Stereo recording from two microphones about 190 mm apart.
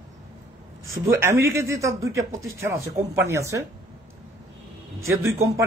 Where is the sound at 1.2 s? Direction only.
15° right (ahead or behind).